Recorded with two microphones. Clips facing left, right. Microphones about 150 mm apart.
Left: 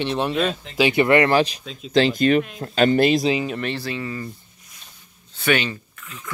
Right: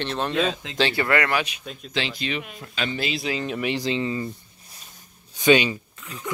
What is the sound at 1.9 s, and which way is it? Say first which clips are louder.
Speech: left 12 dB; 45° left (ahead or behind).